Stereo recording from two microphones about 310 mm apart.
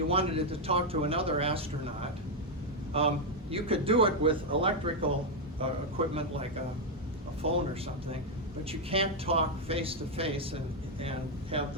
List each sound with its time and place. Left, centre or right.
0.1 s a man's voice: centre
7.4 s a man's voice: centre
8.9 s speech: centre